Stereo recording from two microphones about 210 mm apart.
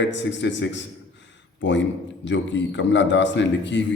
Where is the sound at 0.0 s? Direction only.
60° left (ahead or behind).